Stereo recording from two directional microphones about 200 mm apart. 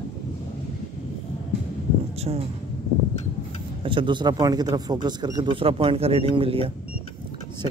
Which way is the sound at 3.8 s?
25° right (ahead or behind).